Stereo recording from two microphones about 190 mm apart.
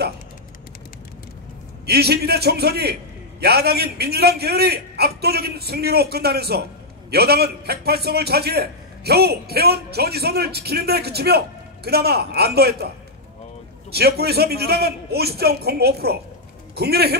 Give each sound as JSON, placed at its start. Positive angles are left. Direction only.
{"t": 1.9, "sound": "a man's voice", "side_deg": -55}
{"t": 13.9, "sound": "a man's voice", "side_deg": -55}